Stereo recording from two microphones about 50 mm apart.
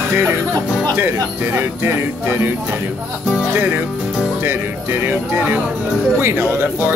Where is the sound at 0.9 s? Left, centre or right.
Right.